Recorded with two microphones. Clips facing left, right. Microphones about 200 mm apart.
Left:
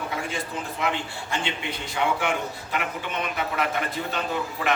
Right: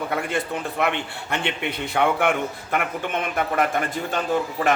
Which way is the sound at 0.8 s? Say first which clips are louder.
Right 3 dB; 65° right (ahead or behind).